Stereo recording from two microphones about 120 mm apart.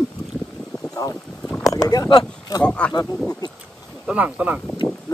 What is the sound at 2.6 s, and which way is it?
Speech, 10° left (ahead or behind).